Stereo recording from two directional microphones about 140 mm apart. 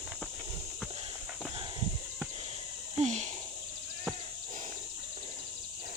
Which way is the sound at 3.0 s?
55° right (ahead or behind).